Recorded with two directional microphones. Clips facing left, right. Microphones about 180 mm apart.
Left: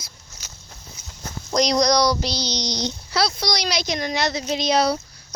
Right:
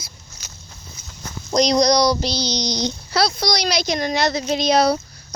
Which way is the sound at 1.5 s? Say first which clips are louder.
Right 3 dB; 20° right (ahead or behind).